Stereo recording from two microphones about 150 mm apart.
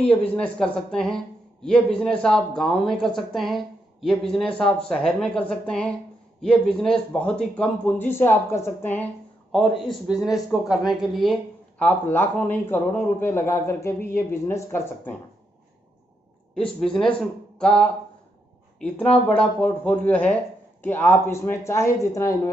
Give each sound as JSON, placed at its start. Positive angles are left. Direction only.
{"t": 0.0, "sound": "a woman's voice", "side_deg": 10}
{"t": 9.5, "sound": "a woman's voice", "side_deg": 0}
{"t": 11.8, "sound": "a man's voice", "side_deg": 10}
{"t": 16.5, "sound": "a woman's voice", "side_deg": 5}
{"t": 17.6, "sound": "a sound", "side_deg": 5}
{"t": 18.8, "sound": "a man's voice", "side_deg": 5}